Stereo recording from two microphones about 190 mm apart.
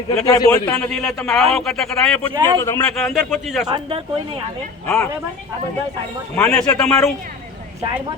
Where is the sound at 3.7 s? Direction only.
25° right (ahead or behind).